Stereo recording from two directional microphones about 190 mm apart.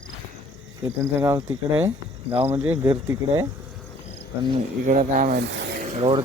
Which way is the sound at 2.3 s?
30° right (ahead or behind).